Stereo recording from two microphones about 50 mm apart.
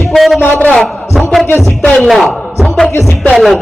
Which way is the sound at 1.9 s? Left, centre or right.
Centre.